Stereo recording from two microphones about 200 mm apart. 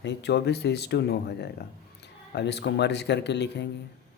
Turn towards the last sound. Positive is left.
turn(degrees=60)  # may be behind; listen again after turning